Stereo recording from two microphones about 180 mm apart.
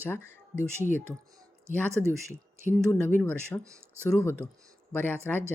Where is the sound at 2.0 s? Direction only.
5° left (ahead or behind).